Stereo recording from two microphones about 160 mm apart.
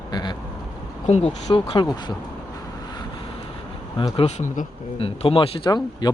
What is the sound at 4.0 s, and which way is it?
Speech, 35° left (ahead or behind).